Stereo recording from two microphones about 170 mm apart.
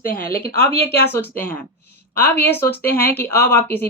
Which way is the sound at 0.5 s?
15° left (ahead or behind).